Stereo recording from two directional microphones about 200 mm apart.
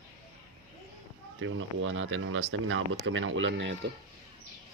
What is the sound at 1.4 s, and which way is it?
Speech, 85° right.